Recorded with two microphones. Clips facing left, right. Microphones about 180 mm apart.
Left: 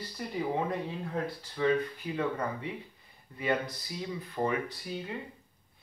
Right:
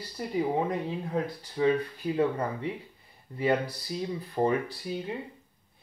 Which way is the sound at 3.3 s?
30° right (ahead or behind).